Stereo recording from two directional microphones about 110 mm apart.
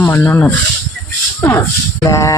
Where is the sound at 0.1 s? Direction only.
20° left (ahead or behind).